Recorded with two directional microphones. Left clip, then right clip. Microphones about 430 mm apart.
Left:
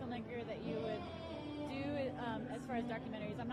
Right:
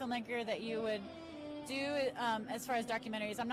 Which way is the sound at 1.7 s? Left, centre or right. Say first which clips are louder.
Right 7 dB; right.